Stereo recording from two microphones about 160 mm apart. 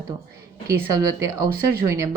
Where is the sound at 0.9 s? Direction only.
20° right (ahead or behind).